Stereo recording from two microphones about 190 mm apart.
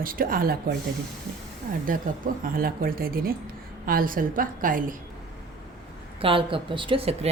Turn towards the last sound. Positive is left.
turn(degrees=-30)  # may be behind; listen again after turning